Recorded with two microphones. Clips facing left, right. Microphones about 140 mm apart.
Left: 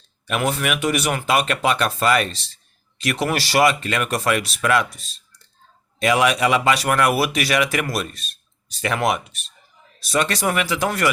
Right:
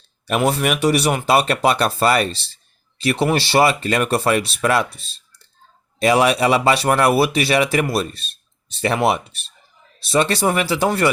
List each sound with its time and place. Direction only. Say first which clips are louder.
0.3 s a man's voice: right 4 dB; 35° right (ahead or behind)